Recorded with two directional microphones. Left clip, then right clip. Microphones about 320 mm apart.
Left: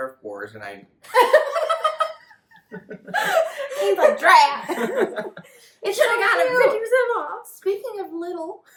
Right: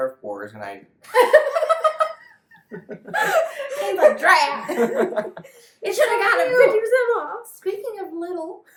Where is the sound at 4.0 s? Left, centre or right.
Centre.